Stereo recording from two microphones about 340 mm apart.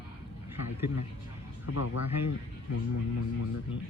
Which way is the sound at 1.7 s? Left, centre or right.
Left.